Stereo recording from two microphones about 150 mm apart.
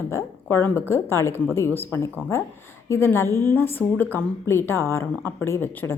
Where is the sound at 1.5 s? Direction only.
15° left (ahead or behind).